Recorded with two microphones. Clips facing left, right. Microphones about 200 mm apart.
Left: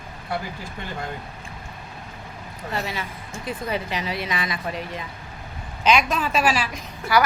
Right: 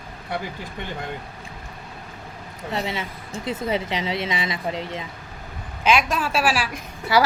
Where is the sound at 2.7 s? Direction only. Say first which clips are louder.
Right 2 dB; 25° right (ahead or behind).